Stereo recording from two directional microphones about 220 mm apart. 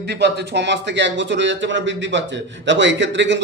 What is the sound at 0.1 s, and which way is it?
A man's voice, 50° right (ahead or behind).